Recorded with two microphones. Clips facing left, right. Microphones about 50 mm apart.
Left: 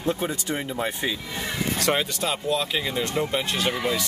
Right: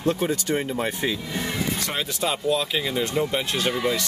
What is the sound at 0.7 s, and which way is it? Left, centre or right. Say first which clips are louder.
Speech: right 2 dB; centre.